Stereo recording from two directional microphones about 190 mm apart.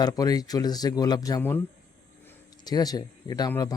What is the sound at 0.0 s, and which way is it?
Speech, 20° left (ahead or behind).